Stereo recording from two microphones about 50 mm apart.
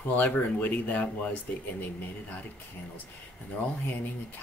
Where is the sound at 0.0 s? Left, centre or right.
Left.